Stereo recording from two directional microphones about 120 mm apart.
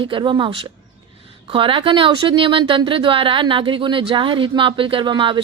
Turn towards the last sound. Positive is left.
turn(degrees=-45)  # may be behind; listen again after turning